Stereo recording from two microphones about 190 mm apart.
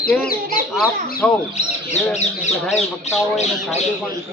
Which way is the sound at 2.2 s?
35° left (ahead or behind).